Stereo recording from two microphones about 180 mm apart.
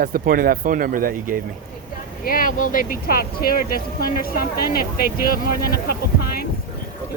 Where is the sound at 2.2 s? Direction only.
50° left (ahead or behind).